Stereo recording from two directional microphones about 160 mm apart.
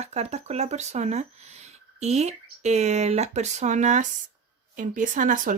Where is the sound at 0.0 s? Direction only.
40° right (ahead or behind).